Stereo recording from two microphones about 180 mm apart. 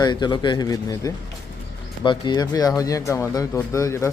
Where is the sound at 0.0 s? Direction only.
25° left (ahead or behind).